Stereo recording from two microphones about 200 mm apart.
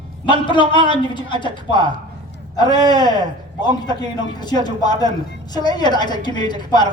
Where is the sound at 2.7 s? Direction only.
20° left (ahead or behind).